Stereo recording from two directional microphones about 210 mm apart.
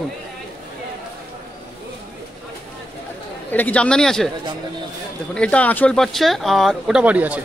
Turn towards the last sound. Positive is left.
turn(degrees=-5)  # may be behind; listen again after turning